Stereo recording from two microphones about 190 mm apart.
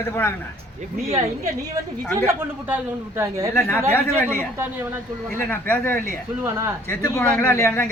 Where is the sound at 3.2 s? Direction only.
15° right (ahead or behind).